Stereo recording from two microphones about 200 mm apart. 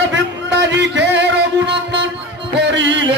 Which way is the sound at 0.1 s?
60° right (ahead or behind).